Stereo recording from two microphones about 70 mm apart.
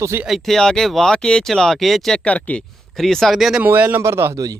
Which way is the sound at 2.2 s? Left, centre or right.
Centre.